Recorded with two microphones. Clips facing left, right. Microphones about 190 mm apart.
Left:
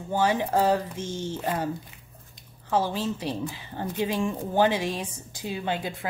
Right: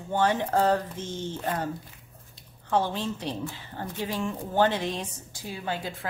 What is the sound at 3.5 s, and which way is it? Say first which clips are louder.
Speech: left 3 dB; 15° left (ahead or behind).